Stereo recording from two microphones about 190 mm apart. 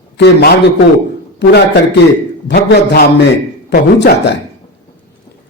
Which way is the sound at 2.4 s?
60° left (ahead or behind).